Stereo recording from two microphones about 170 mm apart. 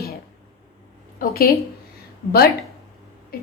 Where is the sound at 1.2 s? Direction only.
60° left (ahead or behind).